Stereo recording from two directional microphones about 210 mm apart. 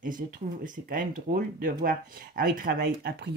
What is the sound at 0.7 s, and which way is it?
Speech, 40° right (ahead or behind).